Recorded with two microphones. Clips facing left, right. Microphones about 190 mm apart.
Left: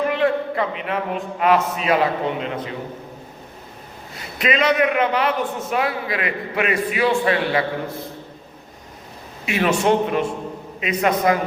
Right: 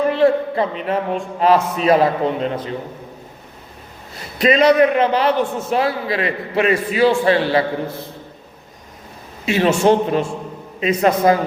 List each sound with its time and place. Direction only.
0.1 s a man's voice: 30° right (ahead or behind)
4.4 s a man's voice: 35° right (ahead or behind)
9.5 s a man's voice: 30° right (ahead or behind)